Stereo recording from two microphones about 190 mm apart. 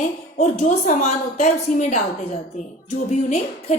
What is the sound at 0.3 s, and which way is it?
A woman's voice, 40° left (ahead or behind).